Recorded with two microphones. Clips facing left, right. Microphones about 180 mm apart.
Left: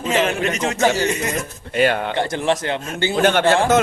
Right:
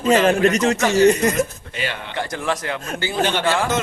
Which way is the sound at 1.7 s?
55° left (ahead or behind).